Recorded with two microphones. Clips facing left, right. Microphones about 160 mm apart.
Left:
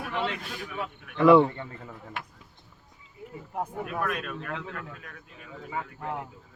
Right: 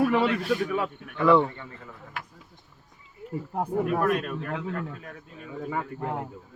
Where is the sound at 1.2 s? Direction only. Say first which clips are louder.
Left 3 dB; 10° left (ahead or behind).